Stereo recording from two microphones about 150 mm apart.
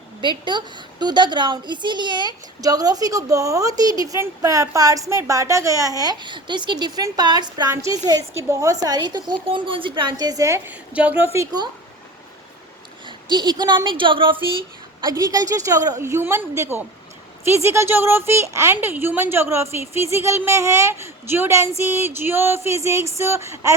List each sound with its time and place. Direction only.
0.2 s a woman's voice: 30° right (ahead or behind); by 11.3 s 10° right (ahead or behind)
11.3 s a woman's voice: 25° right (ahead or behind)
13.1 s speech: 30° right (ahead or behind)
15.0 s a woman's voice: 25° right (ahead or behind)